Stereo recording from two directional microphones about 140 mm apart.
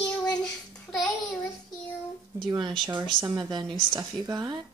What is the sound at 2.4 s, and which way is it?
A woman's voice, 35° right (ahead or behind).